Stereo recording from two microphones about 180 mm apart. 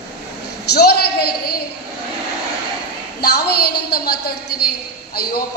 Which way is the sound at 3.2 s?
60° left (ahead or behind).